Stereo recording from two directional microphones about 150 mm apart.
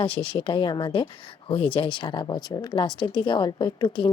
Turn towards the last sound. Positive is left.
turn(degrees=30)  # may be behind; listen again after turning